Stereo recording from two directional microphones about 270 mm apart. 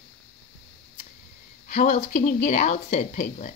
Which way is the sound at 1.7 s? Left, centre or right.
Left.